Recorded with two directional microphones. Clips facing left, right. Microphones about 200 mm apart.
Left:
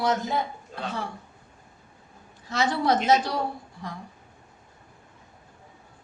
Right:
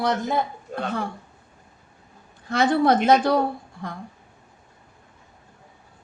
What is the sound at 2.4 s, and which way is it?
A woman's voice, 55° right (ahead or behind).